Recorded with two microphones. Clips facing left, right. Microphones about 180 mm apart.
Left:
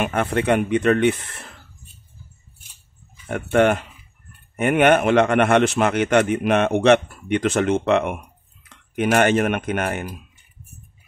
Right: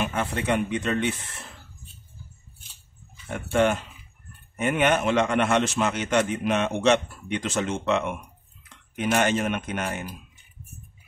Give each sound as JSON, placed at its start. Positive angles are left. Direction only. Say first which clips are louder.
{"t": 0.0, "sound": "a man's voice", "louder": "left 6 dB", "side_deg": 60}
{"t": 3.3, "sound": "a man's voice", "louder": "left 5 dB", "side_deg": 60}